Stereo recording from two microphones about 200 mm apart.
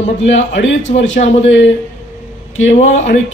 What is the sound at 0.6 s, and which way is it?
Speech, 70° left (ahead or behind).